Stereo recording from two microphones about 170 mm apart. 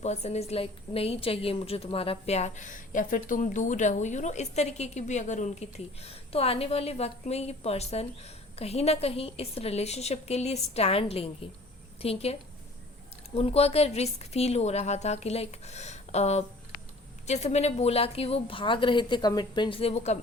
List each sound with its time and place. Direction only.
0.0 s a woman's voice: 40° left (ahead or behind)